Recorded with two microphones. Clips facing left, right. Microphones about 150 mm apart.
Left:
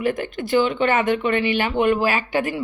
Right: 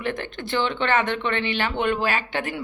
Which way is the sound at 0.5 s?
10° left (ahead or behind).